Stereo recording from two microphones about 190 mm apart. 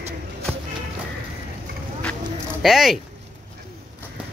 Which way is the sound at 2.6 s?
Centre (ahead or behind).